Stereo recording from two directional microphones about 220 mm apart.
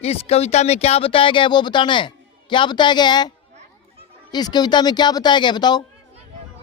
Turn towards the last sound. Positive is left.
turn(degrees=20)  # may be behind; listen again after turning